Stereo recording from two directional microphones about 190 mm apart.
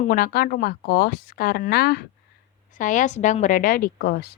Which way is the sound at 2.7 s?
40° left (ahead or behind).